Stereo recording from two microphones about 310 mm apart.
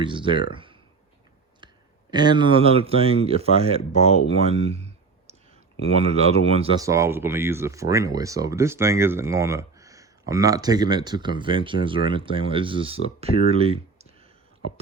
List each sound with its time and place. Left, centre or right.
0.0 s speech: centre
0.5 s a sound: centre
1.6 s speech: centre
4.4 s clicking: centre
5.8 s speech: centre